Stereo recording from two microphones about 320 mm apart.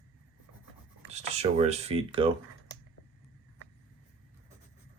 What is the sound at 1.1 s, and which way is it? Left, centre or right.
Speech, centre.